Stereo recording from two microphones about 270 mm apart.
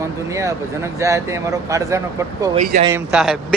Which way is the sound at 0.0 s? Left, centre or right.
Centre.